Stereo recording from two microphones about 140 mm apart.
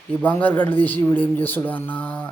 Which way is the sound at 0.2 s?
10° left (ahead or behind).